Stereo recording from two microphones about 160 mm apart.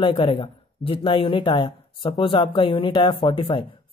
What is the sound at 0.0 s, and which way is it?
Speech, 30° left (ahead or behind).